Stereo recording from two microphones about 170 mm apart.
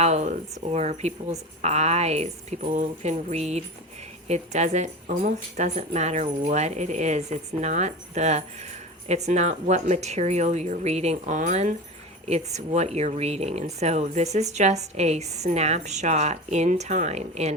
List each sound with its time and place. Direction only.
0.0 s speech: 40° right (ahead or behind)